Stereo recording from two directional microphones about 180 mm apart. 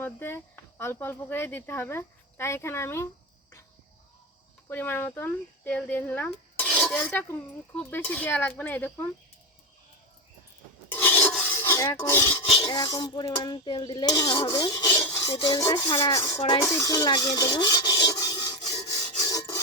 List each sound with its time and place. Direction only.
0.0 s speech: 15° left (ahead or behind)
4.7 s speech: 10° left (ahead or behind)
10.9 s filing: 10° left (ahead or behind)
11.7 s speech: 15° left (ahead or behind)
12.5 s cutlery: 30° left (ahead or behind)
16.4 s rub: 20° left (ahead or behind)
19.2 s filing: 20° left (ahead or behind)